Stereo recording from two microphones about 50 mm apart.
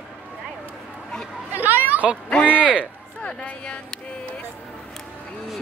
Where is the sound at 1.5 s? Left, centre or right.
Right.